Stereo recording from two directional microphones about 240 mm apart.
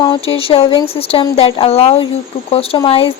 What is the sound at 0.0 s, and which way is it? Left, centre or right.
Speech, left.